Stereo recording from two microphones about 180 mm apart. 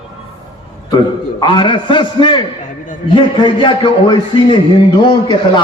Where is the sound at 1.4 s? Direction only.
25° left (ahead or behind).